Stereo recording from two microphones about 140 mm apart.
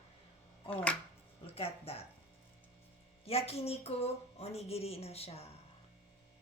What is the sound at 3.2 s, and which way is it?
Speech, 45° left (ahead or behind).